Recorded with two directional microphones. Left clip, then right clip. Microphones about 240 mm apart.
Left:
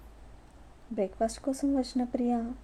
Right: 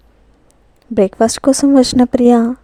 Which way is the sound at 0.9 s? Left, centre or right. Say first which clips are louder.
Right 18 dB; right.